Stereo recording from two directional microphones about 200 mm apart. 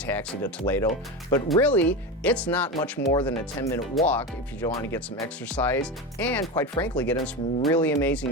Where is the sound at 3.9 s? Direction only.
5° left (ahead or behind).